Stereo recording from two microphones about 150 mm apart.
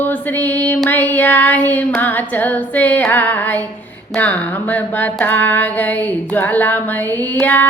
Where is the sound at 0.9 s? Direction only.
10° left (ahead or behind).